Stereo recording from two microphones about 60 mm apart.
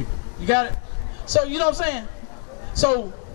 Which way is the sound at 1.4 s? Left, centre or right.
Centre.